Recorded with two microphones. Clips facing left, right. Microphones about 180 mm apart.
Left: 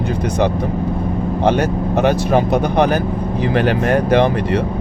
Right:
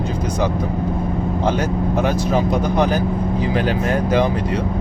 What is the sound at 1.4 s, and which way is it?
Speech, 65° left (ahead or behind).